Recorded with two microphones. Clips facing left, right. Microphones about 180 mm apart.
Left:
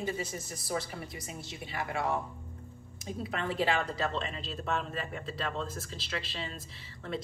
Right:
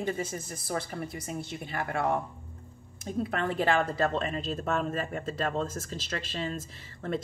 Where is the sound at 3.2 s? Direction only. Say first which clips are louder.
Right 2 dB; 50° right (ahead or behind).